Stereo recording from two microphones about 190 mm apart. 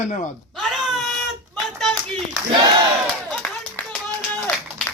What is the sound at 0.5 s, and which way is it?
Wail, centre (ahead or behind).